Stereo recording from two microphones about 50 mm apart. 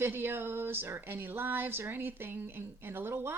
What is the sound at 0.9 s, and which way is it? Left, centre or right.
Speech, right.